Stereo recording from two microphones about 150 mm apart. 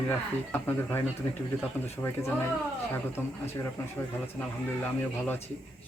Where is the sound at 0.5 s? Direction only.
10° left (ahead or behind).